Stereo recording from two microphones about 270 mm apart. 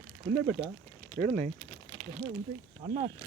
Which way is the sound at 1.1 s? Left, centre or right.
Right.